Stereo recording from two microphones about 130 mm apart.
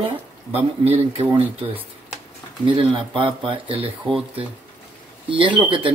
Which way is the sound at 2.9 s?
40° right (ahead or behind).